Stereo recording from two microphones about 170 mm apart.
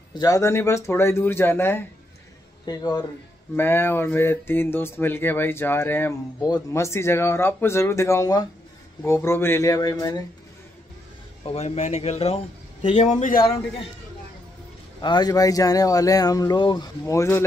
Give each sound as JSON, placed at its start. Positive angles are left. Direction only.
{"t": 0.1, "sound": "speech", "side_deg": 20}
{"t": 2.6, "sound": "a man's voice", "side_deg": 25}
{"t": 3.5, "sound": "speech", "side_deg": 15}
{"t": 11.4, "sound": "a man's voice", "side_deg": 40}
{"t": 15.0, "sound": "a man's voice", "side_deg": 25}